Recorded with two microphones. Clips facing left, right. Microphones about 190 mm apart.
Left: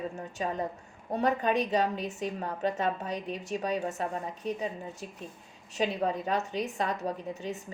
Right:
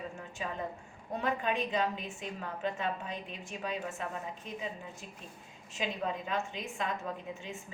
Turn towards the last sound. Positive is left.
turn(degrees=40)  # may be behind; listen again after turning